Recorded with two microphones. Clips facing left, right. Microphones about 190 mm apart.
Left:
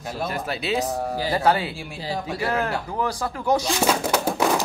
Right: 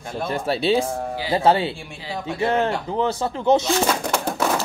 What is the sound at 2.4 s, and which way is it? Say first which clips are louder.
Speech: right 5 dB; 25° right (ahead or behind).